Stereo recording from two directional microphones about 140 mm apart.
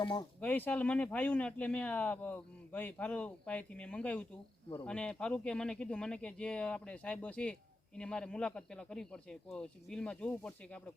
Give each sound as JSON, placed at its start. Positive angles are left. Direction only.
{"t": 0.0, "sound": "speech", "side_deg": 30}
{"t": 0.3, "sound": "speech", "side_deg": 10}